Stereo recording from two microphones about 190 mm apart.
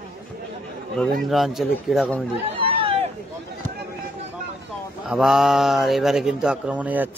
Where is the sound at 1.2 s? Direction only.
Centre (ahead or behind).